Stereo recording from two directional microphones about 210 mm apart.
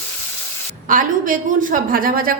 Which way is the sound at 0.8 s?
40° right (ahead or behind).